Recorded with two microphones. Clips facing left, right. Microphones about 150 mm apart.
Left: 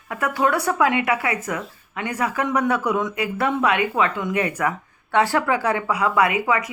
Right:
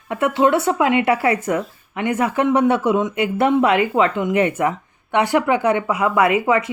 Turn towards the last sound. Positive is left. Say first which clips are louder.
# right 4 dB
turn(degrees=-25)  # may be behind; listen again after turning